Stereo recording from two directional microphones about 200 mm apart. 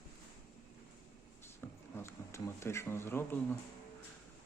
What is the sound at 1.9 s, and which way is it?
Speech, 15° left (ahead or behind).